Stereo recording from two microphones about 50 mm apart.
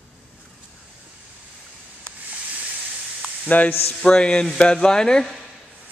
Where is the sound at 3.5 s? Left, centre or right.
Left.